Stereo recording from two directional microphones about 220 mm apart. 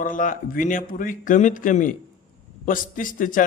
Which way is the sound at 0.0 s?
40° left (ahead or behind).